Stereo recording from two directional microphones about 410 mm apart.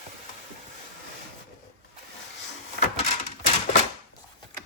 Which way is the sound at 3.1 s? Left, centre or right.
Centre.